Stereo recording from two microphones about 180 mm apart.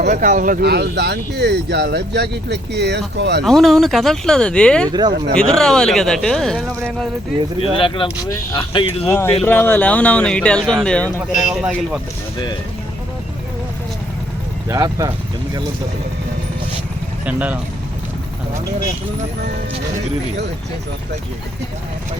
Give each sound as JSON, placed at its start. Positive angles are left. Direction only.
{"t": 0.1, "sound": "speech", "side_deg": -50}
{"t": 3.4, "sound": "speech", "side_deg": 0}
{"t": 4.9, "sound": "speech", "side_deg": -25}
{"t": 5.3, "sound": "speech", "side_deg": 5}
{"t": 7.8, "sound": "speech", "side_deg": 30}
{"t": 9.0, "sound": "speech", "side_deg": 15}
{"t": 11.3, "sound": "speech", "side_deg": -5}
{"t": 14.7, "sound": "speech", "side_deg": -20}
{"t": 17.2, "sound": "speech", "side_deg": -10}